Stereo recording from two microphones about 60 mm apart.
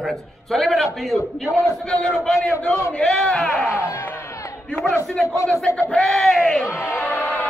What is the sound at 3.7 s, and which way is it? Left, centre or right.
Speech, left.